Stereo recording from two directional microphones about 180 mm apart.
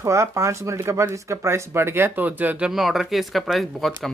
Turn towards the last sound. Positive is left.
turn(degrees=0)  # may be behind; listen again after turning